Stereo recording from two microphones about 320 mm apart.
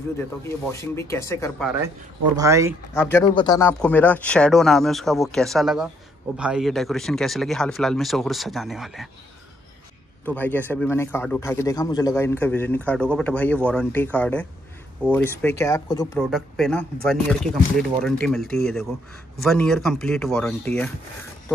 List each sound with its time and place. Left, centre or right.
0.5 s speech: centre
2.3 s speech: centre
2.9 s speech: centre
10.2 s speech: centre
16.3 s speech: centre